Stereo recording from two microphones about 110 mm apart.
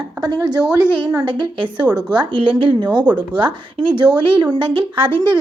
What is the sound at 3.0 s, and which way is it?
Speech, 10° right (ahead or behind).